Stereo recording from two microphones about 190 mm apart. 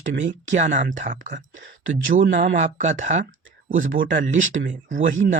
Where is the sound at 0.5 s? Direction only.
40° right (ahead or behind).